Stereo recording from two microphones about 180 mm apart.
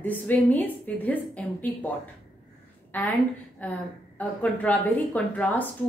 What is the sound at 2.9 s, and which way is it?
A woman's voice, 10° left (ahead or behind).